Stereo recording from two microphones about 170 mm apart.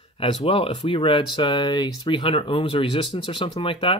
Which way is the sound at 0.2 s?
35° left (ahead or behind).